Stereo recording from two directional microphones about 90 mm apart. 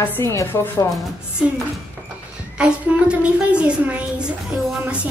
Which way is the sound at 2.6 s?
10° right (ahead or behind).